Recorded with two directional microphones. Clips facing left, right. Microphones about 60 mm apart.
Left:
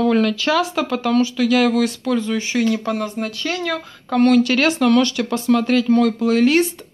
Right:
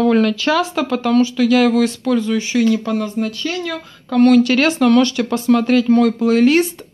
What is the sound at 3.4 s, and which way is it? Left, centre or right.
Speech, left.